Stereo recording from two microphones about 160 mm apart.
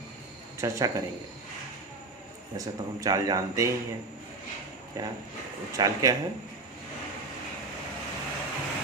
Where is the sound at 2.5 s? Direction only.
20° right (ahead or behind).